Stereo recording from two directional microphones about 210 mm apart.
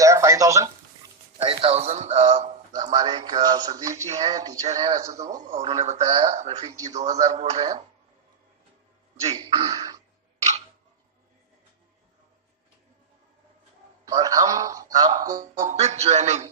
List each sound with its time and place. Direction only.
0.0 s a sound: 15° right (ahead or behind)
1.4 s a man's voice: 25° right (ahead or behind)
2.9 s speech: 20° right (ahead or behind)
3.9 s a man's voice: 30° right (ahead or behind)
4.2 s a man's voice: 20° right (ahead or behind)
5.5 s a man's voice: 30° right (ahead or behind)
7.1 s a man's voice: 15° right (ahead or behind)
7.3 s speech: 30° right (ahead or behind)
9.2 s speech: 25° right (ahead or behind)
14.1 s a man's voice: 15° right (ahead or behind)
15.6 s a man's voice: 30° right (ahead or behind)